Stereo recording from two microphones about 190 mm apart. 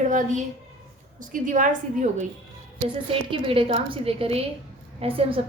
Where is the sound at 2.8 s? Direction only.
25° right (ahead or behind).